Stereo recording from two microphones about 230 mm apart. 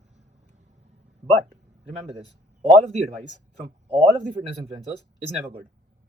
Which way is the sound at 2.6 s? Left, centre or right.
Right.